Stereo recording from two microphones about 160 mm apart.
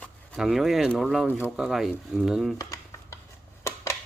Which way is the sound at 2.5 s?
20° left (ahead or behind).